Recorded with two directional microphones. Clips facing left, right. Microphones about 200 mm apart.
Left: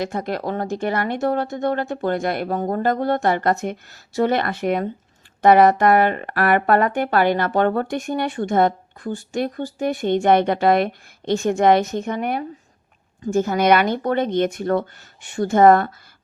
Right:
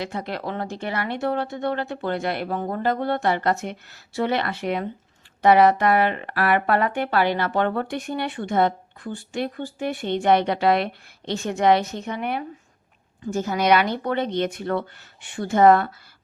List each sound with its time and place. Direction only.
0.0 s speech: 45° left (ahead or behind)